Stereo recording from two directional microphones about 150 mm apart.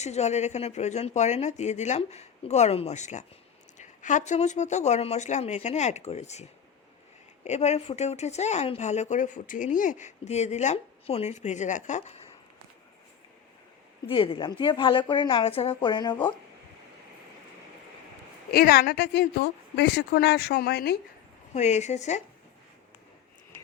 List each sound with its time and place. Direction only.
0.0 s speech: 50° left (ahead or behind)
7.4 s speech: 50° left (ahead or behind)
14.1 s a woman's voice: 35° left (ahead or behind)
18.5 s speech: 85° left
21.5 s speech: 50° left (ahead or behind)